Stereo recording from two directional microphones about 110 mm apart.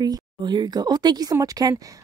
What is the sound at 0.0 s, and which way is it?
Speech, 40° right (ahead or behind).